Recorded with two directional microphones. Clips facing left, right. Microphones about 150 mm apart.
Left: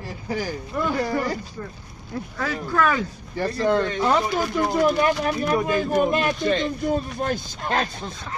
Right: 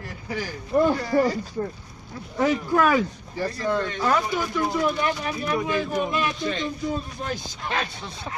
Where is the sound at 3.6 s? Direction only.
65° left (ahead or behind).